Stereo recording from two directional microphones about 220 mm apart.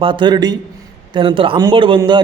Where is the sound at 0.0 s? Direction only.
20° right (ahead or behind).